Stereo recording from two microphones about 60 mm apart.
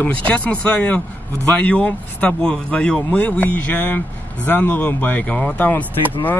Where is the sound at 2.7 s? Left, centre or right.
Centre.